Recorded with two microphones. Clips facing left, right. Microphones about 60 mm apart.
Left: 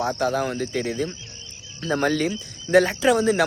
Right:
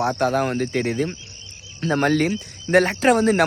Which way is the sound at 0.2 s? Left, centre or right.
Right.